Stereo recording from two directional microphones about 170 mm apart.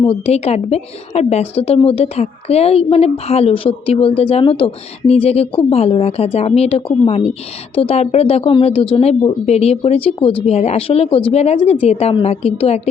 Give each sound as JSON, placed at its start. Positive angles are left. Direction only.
{"t": 0.0, "sound": "a woman's voice", "side_deg": 35}